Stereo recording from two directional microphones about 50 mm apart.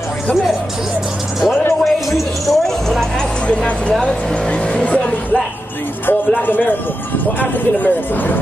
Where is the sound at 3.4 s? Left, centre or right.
Left.